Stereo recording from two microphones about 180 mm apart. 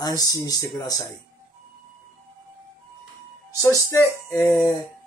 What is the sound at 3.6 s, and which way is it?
Speech, 15° left (ahead or behind).